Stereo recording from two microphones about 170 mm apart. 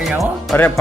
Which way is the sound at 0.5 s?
10° left (ahead or behind).